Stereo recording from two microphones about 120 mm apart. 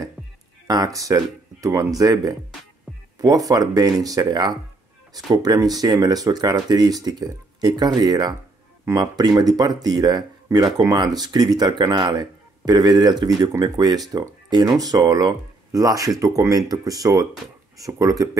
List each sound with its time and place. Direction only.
0.7 s speech: 30° right (ahead or behind)